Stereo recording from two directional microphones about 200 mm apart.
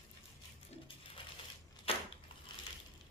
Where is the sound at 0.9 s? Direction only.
25° left (ahead or behind).